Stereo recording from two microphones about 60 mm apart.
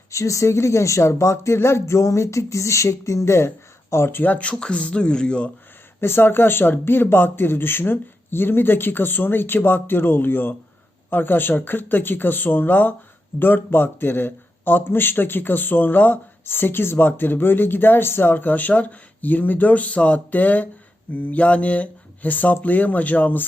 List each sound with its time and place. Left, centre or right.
0.1 s speech: left
4.2 s speech: left
6.0 s a man's voice: left